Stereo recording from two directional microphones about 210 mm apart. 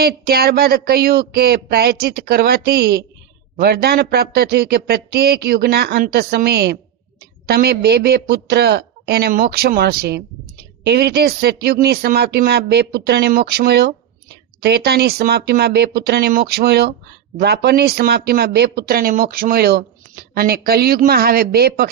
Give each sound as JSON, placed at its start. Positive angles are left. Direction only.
{"t": 0.0, "sound": "speech", "side_deg": -50}